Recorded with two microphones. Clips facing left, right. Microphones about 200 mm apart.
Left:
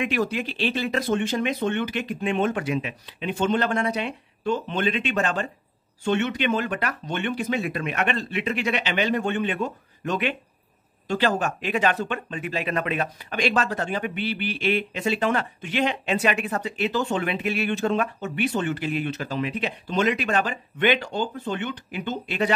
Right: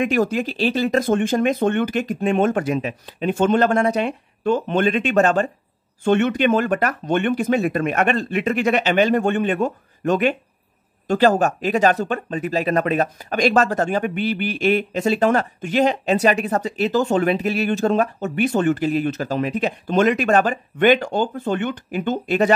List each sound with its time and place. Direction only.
0.0 s speech: 45° right (ahead or behind)